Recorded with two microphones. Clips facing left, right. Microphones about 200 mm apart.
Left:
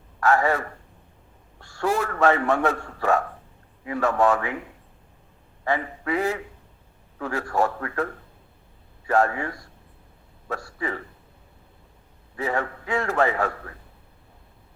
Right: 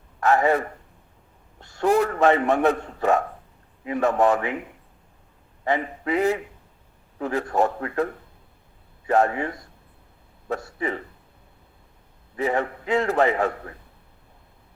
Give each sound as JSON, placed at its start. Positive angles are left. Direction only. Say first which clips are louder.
{"t": 0.2, "sound": "a man's voice", "louder": "right 2 dB", "side_deg": -20}
{"t": 12.4, "sound": "a man's voice", "louder": "right 3 dB", "side_deg": -20}